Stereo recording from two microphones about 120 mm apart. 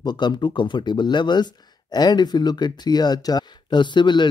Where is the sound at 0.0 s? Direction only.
35° left (ahead or behind).